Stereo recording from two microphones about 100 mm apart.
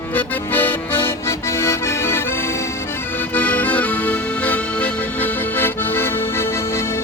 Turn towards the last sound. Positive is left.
turn(degrees=25)  # may be behind; listen again after turning